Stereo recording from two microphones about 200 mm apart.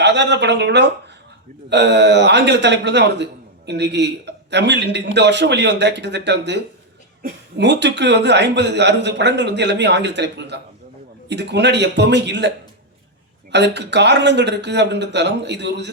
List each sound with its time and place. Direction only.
0.0 s speech: 60° right (ahead or behind)
13.5 s speech: 60° right (ahead or behind)